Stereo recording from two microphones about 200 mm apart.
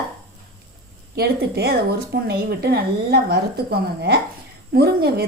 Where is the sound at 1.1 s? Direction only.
50° right (ahead or behind).